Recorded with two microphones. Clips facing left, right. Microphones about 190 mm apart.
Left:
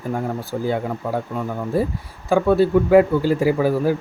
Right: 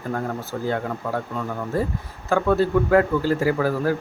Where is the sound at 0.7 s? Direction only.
15° left (ahead or behind).